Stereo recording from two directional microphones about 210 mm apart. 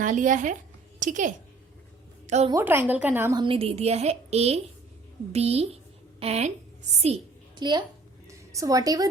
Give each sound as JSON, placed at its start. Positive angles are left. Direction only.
{"t": 0.0, "sound": "a woman's voice", "side_deg": -35}
{"t": 2.5, "sound": "a woman's voice", "side_deg": -10}
{"t": 3.4, "sound": "a woman's voice", "side_deg": -25}